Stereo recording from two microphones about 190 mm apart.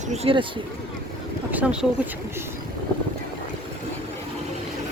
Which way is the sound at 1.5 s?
5° right (ahead or behind).